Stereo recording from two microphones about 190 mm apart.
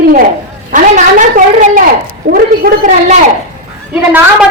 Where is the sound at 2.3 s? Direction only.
50° right (ahead or behind).